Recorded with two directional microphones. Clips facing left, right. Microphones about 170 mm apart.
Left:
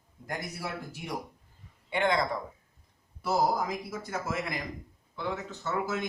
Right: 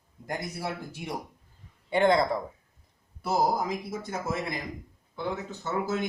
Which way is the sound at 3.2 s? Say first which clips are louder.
Right 1 dB; 25° right (ahead or behind).